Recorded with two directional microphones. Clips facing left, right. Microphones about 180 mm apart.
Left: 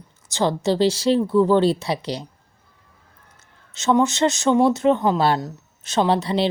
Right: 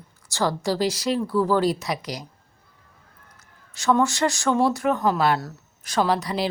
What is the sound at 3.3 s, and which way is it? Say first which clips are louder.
A woman's voice: left 1 dB; 25° left (ahead or behind).